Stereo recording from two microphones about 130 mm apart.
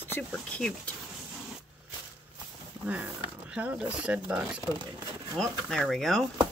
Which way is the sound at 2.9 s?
10° right (ahead or behind).